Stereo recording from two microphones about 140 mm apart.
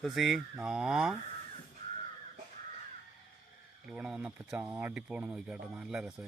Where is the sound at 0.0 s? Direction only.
Centre (ahead or behind).